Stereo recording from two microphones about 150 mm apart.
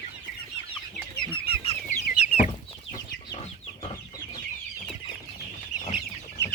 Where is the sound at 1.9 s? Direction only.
50° left (ahead or behind).